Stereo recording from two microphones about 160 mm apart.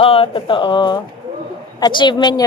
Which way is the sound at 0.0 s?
35° left (ahead or behind).